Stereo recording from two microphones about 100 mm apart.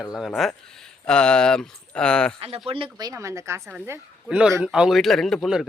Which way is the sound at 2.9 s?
35° right (ahead or behind).